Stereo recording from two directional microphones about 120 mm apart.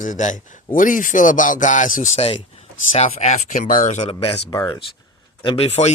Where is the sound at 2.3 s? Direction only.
60° left (ahead or behind).